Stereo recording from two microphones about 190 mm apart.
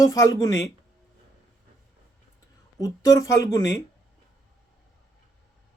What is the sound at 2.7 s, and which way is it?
Speech, 20° left (ahead or behind).